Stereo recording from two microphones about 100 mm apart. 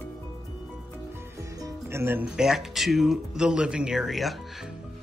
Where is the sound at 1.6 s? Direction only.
30° right (ahead or behind).